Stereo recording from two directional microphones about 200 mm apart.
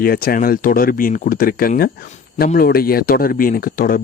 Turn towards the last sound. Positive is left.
turn(degrees=45)  # may be behind; listen again after turning